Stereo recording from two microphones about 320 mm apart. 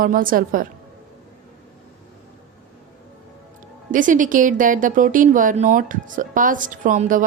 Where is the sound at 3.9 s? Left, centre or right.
Right.